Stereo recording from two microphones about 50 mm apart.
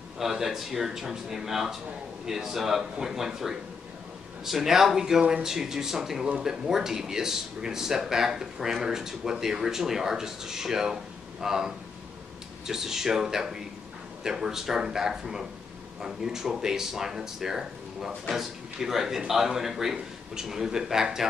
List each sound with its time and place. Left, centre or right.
0.2 s speech: centre